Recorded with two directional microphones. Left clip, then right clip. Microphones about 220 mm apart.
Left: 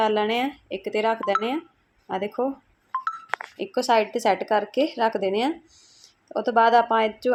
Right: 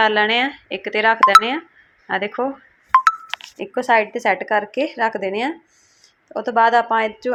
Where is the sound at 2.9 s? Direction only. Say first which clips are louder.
Right 15 dB; 45° right (ahead or behind).